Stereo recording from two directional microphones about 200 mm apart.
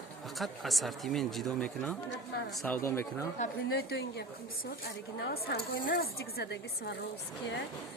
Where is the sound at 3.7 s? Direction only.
55° left (ahead or behind).